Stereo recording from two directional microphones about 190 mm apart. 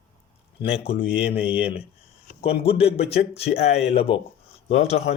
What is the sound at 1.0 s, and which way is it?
Speech, 5° right (ahead or behind).